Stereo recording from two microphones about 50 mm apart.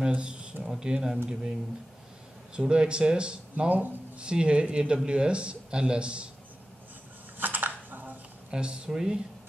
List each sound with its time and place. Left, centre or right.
0.0 s speech: centre
2.5 s speech: centre
4.2 s speech: centre
7.3 s a sound: right
8.5 s speech: centre